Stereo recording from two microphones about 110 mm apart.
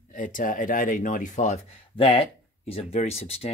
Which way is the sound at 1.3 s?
90° left.